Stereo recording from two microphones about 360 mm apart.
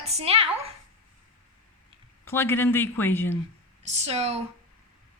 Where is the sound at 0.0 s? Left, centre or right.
Centre.